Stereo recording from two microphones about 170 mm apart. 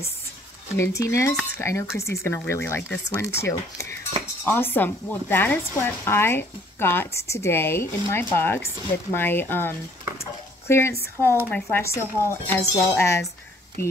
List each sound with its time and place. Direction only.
0.7 s speech: 15° left (ahead or behind)